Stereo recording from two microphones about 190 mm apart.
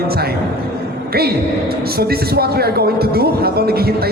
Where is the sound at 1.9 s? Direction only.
55° right (ahead or behind).